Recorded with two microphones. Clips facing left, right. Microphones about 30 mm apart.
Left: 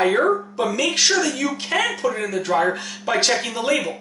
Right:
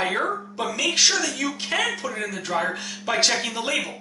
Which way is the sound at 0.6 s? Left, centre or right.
Centre.